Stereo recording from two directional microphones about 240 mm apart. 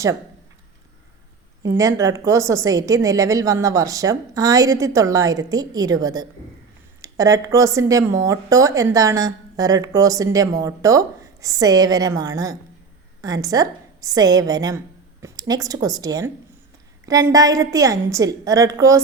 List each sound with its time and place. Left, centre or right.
1.8 s a woman's voice: centre